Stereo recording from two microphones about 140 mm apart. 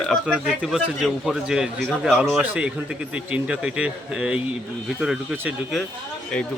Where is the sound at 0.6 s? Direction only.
Centre (ahead or behind).